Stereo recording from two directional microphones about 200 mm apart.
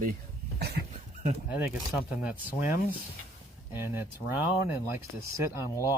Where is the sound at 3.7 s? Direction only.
10° right (ahead or behind).